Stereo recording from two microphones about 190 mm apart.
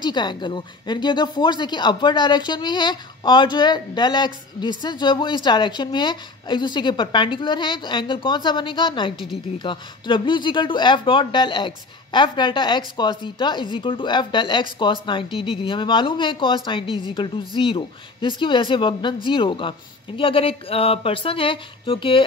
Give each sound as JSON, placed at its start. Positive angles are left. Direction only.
{"t": 0.0, "sound": "speech", "side_deg": 25}